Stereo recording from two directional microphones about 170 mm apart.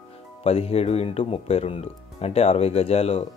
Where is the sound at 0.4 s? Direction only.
35° left (ahead or behind).